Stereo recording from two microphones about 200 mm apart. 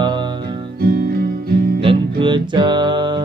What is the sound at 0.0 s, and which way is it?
Music, 20° right (ahead or behind).